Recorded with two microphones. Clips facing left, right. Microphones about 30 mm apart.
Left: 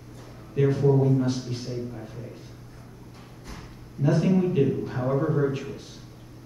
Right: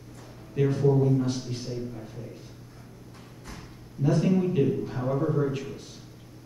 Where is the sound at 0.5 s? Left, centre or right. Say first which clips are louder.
Left 2 dB; centre.